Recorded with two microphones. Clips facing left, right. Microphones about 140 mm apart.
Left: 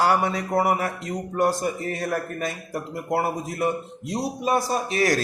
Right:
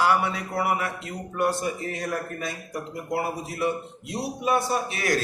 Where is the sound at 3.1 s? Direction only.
50° left (ahead or behind).